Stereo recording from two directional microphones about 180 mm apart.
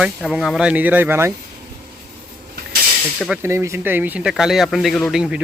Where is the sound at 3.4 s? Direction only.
15° right (ahead or behind).